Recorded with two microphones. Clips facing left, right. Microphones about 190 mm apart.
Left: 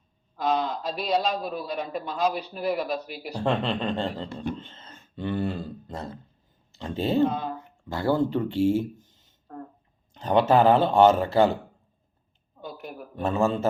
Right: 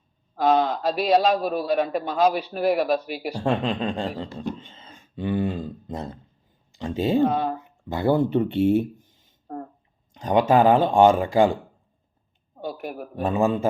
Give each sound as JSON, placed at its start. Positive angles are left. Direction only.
{"t": 0.3, "sound": "a man's voice", "side_deg": -55}
{"t": 3.3, "sound": "speech", "side_deg": -10}
{"t": 4.7, "sound": "a sound", "side_deg": -10}
{"t": 6.7, "sound": "speech", "side_deg": -10}
{"t": 7.2, "sound": "a man's voice", "side_deg": -60}
{"t": 7.9, "sound": "speech", "side_deg": -20}
{"t": 9.0, "sound": "a sound", "side_deg": -55}
{"t": 10.2, "sound": "speech", "side_deg": -10}
{"t": 12.5, "sound": "a sound", "side_deg": -60}
{"t": 13.2, "sound": "speech", "side_deg": -15}